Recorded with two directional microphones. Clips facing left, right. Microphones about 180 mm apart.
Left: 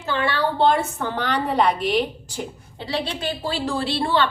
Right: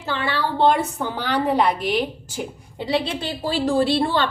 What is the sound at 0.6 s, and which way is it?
A woman's voice, 15° right (ahead or behind).